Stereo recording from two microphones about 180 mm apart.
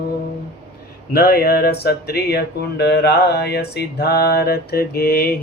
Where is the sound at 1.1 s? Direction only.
60° left (ahead or behind).